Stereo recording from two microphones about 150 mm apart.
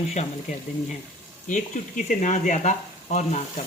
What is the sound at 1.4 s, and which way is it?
Speech, 60° left (ahead or behind).